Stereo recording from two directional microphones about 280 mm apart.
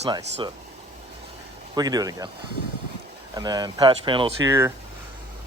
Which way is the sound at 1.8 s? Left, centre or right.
Centre.